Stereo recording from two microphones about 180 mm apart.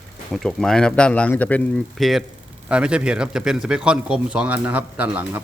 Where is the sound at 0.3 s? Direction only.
5° left (ahead or behind).